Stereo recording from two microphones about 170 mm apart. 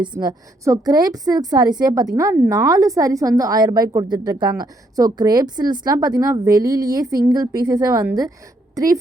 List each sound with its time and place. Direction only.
0.0 s a woman's voice: 25° right (ahead or behind)